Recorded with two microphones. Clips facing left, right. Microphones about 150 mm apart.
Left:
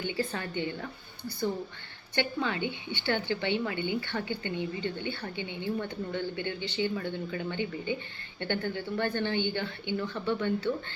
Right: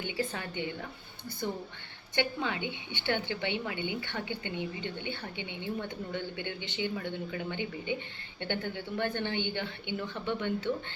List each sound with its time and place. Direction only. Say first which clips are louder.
0.3 s a woman's voice: left 3 dB; 15° right (ahead or behind)
2.1 s a woman's voice: left 2 dB; 20° right (ahead or behind)